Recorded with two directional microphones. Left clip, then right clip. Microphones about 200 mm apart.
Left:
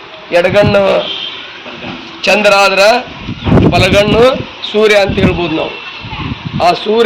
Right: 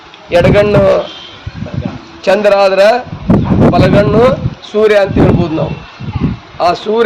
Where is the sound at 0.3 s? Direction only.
40° right (ahead or behind).